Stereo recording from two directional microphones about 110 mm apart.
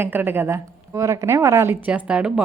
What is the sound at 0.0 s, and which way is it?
A woman's voice, 20° right (ahead or behind).